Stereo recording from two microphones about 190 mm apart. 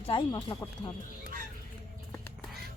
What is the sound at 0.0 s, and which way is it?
Speech, 25° left (ahead or behind).